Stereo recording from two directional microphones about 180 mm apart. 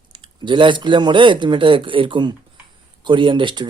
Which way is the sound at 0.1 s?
25° right (ahead or behind).